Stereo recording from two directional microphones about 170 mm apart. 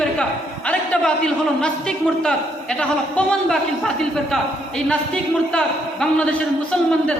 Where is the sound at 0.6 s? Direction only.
5° left (ahead or behind).